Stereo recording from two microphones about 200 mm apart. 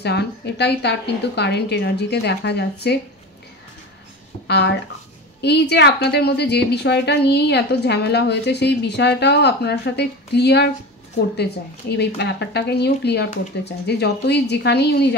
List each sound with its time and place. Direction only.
0.0 s a woman's voice: 55° left (ahead or behind)
4.5 s a woman's voice: 55° left (ahead or behind)
12.0 s a woman's voice: 60° left (ahead or behind)